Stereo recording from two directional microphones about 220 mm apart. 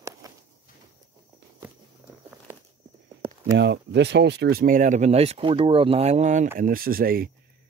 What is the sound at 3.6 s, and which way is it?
Speech, 50° right (ahead or behind).